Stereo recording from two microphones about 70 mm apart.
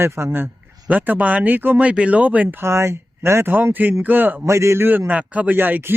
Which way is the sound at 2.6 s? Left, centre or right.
Right.